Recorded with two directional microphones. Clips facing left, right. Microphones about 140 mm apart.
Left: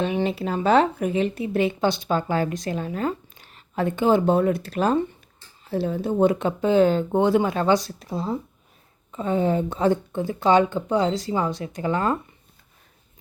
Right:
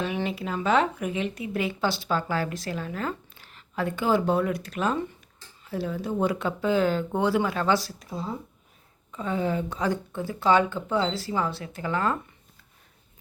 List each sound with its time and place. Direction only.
0.0 s speech: 25° left (ahead or behind)
7.9 s speech: 35° left (ahead or behind)